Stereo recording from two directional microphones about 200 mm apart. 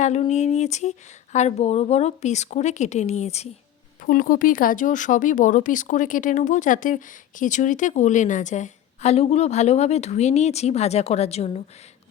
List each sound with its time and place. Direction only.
0.0 s speech: 35° left (ahead or behind)
4.0 s speech: 45° left (ahead or behind)